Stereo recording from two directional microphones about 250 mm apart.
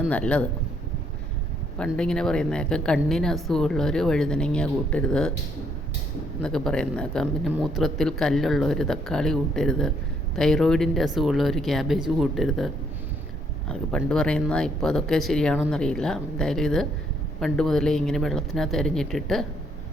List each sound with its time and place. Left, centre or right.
0.1 s speech: centre
1.8 s speech: centre
6.4 s speech: centre